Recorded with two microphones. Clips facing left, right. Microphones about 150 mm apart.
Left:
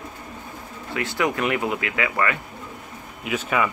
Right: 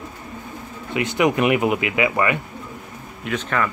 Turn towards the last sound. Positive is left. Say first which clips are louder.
# even
turn(degrees=10)  # may be behind; listen again after turning